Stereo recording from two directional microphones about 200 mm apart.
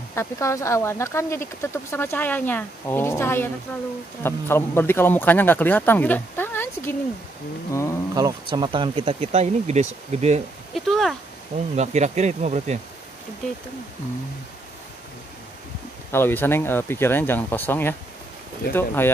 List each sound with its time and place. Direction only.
0.1 s speech: 15° left (ahead or behind)
8.1 s speech: 20° right (ahead or behind)
10.7 s a sound: centre (ahead or behind)
11.7 s insect: 35° right (ahead or behind)
16.1 s speech: 10° left (ahead or behind)